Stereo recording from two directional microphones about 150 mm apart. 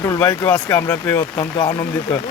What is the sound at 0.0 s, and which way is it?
Speech, 20° left (ahead or behind).